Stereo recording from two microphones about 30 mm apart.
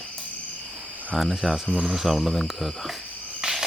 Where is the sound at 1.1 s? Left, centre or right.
Centre.